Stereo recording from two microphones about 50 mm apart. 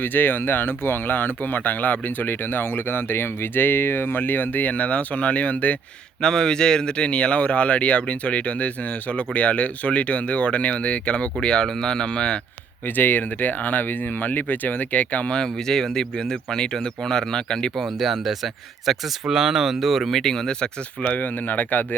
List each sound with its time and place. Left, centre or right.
0.0 s speech: left
6.2 s speech: centre
12.8 s speech: left
15.4 s speech: centre
17.8 s speech: centre
21.0 s speech: left